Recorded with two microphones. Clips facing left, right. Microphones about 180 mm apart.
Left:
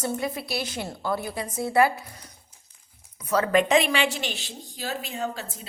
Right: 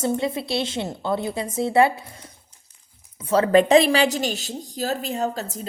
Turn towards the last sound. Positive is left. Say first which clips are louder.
# right 5 dB
turn(degrees=-40)  # may be behind; listen again after turning